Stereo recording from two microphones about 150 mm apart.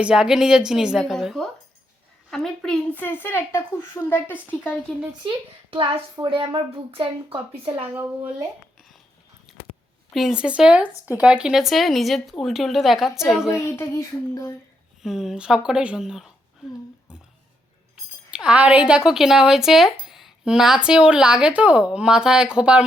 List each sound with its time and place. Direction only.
0.0 s a woman's voice: 5° right (ahead or behind); by 4.7 s 15° left (ahead or behind)
5.7 s a woman's voice: 35° right (ahead or behind)
7.9 s a woman's voice: 10° right (ahead or behind)
9.5 s a sound: 5° right (ahead or behind)
10.1 s speech: centre (ahead or behind)
13.5 s speech: 20° left (ahead or behind)
15.0 s speech: 5° right (ahead or behind)
18.3 s speech: 5° right (ahead or behind)